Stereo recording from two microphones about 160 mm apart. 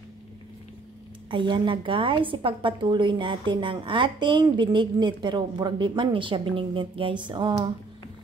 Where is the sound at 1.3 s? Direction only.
30° right (ahead or behind).